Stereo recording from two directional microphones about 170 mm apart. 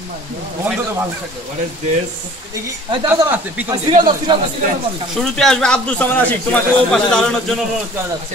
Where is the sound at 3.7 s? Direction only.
25° right (ahead or behind).